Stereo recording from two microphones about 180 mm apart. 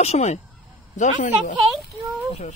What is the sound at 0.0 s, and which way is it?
Speech, 35° left (ahead or behind).